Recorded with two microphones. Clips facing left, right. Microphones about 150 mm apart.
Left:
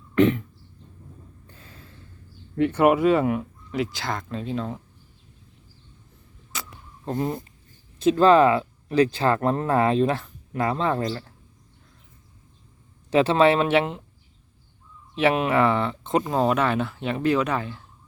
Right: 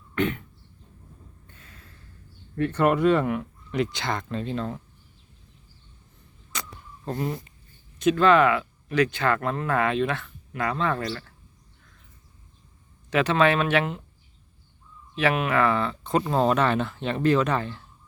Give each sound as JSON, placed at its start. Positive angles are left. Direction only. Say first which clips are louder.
{"t": 1.5, "sound": "a sound", "louder": "left 4 dB", "side_deg": 30}
{"t": 2.6, "sound": "speech", "louder": "left 3 dB", "side_deg": 10}
{"t": 6.5, "sound": "a sound", "louder": "right 1 dB", "side_deg": 5}
{"t": 7.0, "sound": "speech", "louder": "left 3 dB", "side_deg": 20}
{"t": 13.1, "sound": "speech", "louder": "left 3 dB", "side_deg": 30}
{"t": 15.1, "sound": "speech", "louder": "left 3 dB", "side_deg": 25}
{"t": 16.3, "sound": "speech", "louder": "right 1 dB", "side_deg": 10}